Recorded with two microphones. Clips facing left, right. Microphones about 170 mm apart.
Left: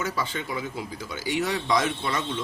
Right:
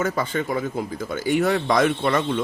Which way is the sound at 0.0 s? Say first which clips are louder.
Right 6 dB; 50° right (ahead or behind).